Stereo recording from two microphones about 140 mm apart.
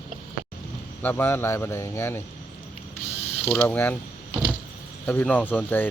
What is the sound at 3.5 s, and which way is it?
Speech, 15° left (ahead or behind).